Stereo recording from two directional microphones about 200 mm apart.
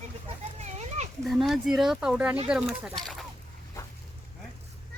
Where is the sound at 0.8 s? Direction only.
35° right (ahead or behind).